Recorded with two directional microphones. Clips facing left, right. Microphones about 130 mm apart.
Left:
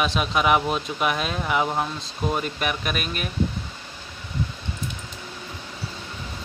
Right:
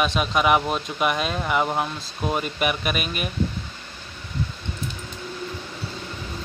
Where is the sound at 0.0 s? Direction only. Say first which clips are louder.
Right 1 dB; centre (ahead or behind).